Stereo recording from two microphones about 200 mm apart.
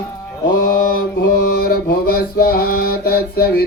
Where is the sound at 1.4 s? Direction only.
45° left (ahead or behind).